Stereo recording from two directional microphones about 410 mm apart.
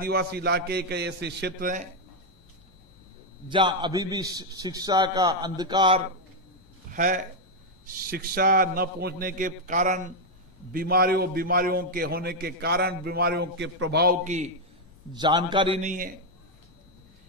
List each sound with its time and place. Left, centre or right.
0.0 s a man's voice: right
3.4 s a man's voice: centre
6.9 s a sound: centre
7.8 s a man's voice: right